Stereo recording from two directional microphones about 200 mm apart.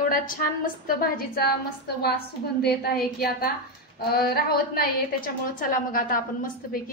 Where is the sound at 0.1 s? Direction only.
45° left (ahead or behind).